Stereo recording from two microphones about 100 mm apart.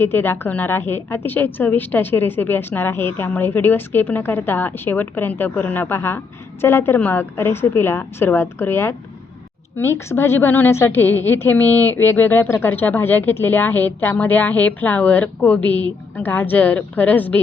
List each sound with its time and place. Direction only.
0.0 s a woman's voice: 20° left (ahead or behind)